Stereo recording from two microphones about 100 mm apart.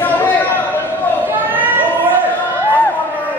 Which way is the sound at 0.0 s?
20° left (ahead or behind).